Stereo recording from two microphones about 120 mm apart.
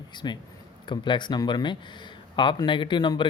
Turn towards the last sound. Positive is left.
turn(degrees=40)  # may be behind; listen again after turning